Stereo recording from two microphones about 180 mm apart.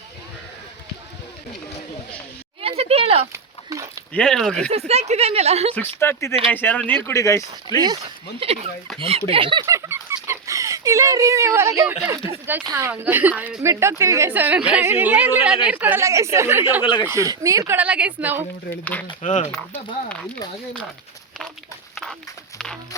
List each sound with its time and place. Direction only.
2.6 s a sound: 35° right (ahead or behind)
3.3 s dog: 15° right (ahead or behind)
4.1 s speech: 5° left (ahead or behind)
4.9 s a woman's voice: 35° right (ahead or behind)
6.0 s speech: 15° left (ahead or behind)
8.4 s a woman's voice: 30° right (ahead or behind)
9.6 s chicken: 15° right (ahead or behind)
12.0 s a woman's voice: 10° right (ahead or behind)
16.8 s speech: 25° left (ahead or behind)
17.1 s a woman's voice: 15° right (ahead or behind)
19.2 s speech: 45° left (ahead or behind)
19.5 s speech: 5° left (ahead or behind)
22.5 s a sound: 5° left (ahead or behind)